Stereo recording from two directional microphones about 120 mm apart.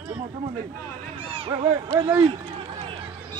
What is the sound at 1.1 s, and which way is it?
Speech, 50° right (ahead or behind).